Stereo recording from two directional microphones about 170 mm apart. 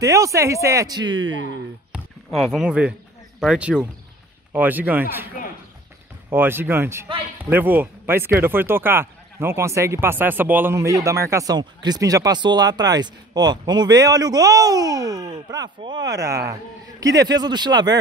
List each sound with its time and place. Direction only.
0.0 s speech: 20° right (ahead or behind)
1.2 s speech: 90° right
1.9 s a sound: centre (ahead or behind)
3.3 s speech: 5° right (ahead or behind)
6.3 s speech: 10° right (ahead or behind)